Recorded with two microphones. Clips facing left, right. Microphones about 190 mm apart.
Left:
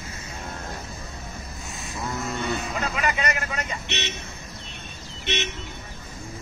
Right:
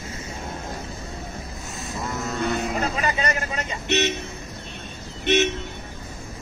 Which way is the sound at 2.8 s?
30° right (ahead or behind).